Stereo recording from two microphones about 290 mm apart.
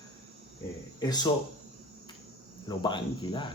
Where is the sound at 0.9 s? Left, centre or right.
Centre.